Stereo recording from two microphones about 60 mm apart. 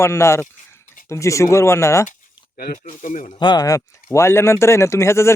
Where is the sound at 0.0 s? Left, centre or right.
Left.